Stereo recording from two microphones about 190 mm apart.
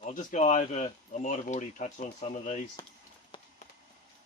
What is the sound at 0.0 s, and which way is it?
Speech, 45° left (ahead or behind).